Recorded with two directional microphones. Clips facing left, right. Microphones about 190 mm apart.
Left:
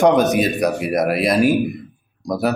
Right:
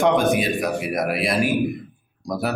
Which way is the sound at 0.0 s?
40° left (ahead or behind).